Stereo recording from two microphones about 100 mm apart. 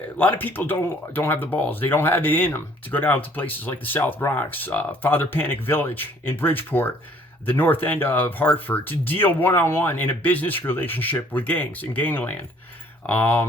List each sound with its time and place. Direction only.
0.2 s speech: 20° left (ahead or behind)